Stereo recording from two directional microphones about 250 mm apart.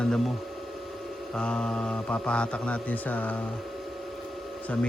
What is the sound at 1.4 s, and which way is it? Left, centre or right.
Speech, centre.